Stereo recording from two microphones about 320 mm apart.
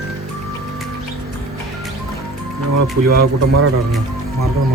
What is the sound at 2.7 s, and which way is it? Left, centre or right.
Speech, right.